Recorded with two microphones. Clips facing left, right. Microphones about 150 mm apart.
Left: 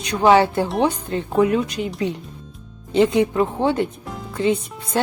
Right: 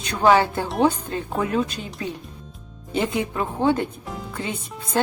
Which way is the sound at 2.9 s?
20° left (ahead or behind).